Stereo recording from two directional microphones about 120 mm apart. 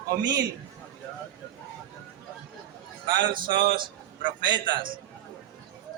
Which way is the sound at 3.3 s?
40° right (ahead or behind).